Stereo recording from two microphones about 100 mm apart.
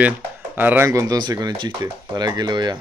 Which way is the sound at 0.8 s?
35° right (ahead or behind).